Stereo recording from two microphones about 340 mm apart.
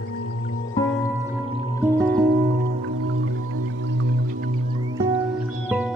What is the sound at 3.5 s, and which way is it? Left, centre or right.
Music, right.